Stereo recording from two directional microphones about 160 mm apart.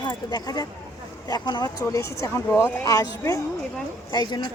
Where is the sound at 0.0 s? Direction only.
25° left (ahead or behind).